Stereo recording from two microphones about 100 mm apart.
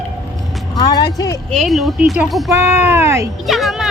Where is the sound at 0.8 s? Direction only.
40° left (ahead or behind).